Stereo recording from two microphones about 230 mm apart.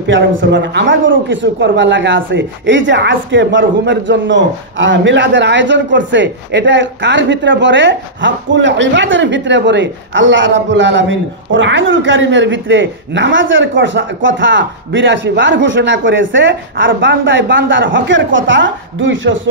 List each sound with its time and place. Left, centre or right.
0.0 s a man's voice: right